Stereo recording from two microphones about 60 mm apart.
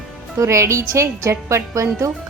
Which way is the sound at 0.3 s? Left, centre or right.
Right.